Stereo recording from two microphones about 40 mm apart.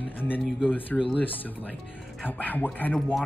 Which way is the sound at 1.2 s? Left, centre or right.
Left.